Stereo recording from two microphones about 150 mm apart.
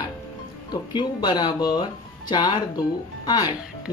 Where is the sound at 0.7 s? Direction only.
30° left (ahead or behind).